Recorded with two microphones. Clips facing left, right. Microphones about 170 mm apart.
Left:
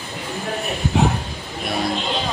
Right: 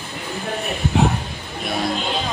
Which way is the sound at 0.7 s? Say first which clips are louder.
Even; centre (ahead or behind).